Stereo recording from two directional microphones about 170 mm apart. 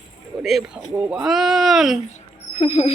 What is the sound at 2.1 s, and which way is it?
Rodents, 40° left (ahead or behind).